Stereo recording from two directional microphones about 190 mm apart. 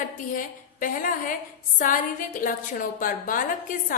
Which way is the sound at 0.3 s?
45° left (ahead or behind).